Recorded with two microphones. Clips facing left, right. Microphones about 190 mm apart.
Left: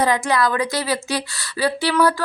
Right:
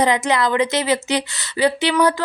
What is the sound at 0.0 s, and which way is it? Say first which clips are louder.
A woman's voice: right 1 dB; 20° right (ahead or behind).